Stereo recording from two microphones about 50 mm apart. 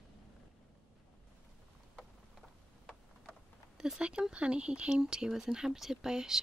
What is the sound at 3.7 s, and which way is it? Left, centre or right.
Speech, centre.